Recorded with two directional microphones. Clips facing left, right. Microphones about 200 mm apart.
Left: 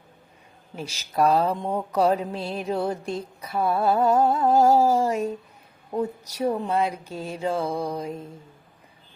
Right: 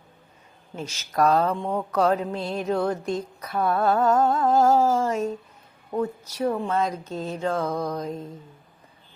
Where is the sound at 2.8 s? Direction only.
30° left (ahead or behind).